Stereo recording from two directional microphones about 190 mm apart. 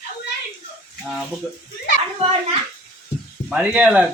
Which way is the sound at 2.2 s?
35° right (ahead or behind).